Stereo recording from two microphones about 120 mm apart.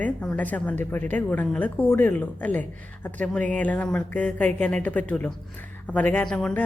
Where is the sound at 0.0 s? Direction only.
10° left (ahead or behind).